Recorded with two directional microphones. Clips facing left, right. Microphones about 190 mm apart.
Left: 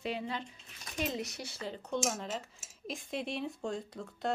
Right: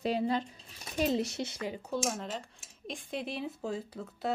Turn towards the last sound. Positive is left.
turn(degrees=-5)  # may be behind; listen again after turning